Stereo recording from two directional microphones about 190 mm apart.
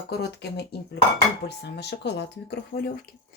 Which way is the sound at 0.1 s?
60° left (ahead or behind).